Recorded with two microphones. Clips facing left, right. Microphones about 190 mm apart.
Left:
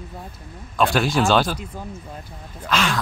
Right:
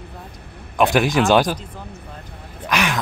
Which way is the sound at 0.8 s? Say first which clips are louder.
Right 3 dB; 20° right (ahead or behind).